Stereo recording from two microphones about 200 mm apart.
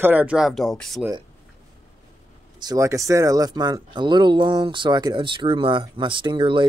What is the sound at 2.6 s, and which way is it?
Speech, 15° right (ahead or behind).